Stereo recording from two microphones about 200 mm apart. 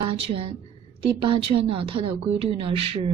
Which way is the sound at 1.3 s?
25° right (ahead or behind).